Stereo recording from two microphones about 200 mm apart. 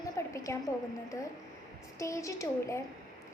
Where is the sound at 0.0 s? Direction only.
15° left (ahead or behind).